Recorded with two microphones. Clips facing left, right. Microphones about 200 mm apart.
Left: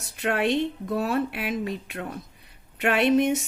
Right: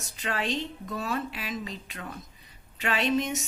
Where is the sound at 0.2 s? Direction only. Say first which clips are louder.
Left 7 dB; 60° left (ahead or behind).